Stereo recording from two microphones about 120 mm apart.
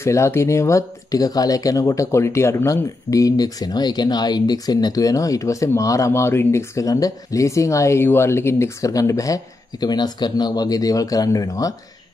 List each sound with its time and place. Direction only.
0.0 s speech: 25° left (ahead or behind)